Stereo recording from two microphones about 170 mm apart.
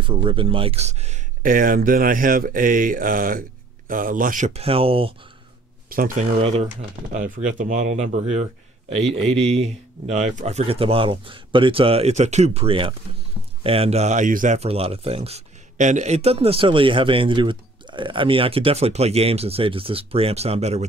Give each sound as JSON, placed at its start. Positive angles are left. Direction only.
{"t": 0.0, "sound": "speech", "side_deg": -30}
{"t": 4.6, "sound": "speech", "side_deg": -35}
{"t": 5.9, "sound": "speech", "side_deg": -55}
{"t": 6.4, "sound": "speech", "side_deg": -40}